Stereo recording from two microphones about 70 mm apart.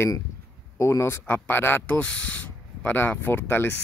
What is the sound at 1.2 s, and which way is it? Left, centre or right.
Speech, left.